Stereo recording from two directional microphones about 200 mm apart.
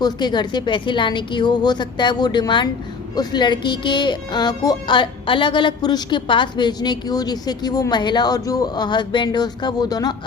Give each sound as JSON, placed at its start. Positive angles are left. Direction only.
{"t": 0.0, "sound": "speech", "side_deg": 20}